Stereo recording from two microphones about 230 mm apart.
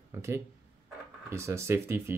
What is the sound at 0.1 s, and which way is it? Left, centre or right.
Speech, centre.